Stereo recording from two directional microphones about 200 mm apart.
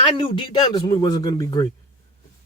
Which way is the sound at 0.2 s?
20° left (ahead or behind).